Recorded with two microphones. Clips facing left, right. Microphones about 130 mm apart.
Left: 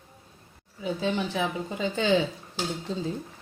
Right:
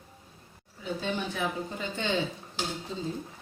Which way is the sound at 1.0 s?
90° left.